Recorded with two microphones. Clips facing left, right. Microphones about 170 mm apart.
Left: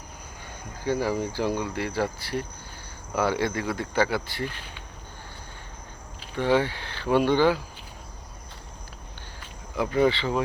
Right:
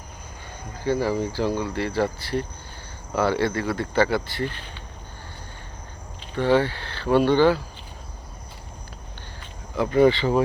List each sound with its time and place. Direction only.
0.9 s speech: 10° left (ahead or behind)
6.3 s speech: 15° left (ahead or behind)
9.4 s a sound: 5° left (ahead or behind)
10.2 s speech: 40° right (ahead or behind)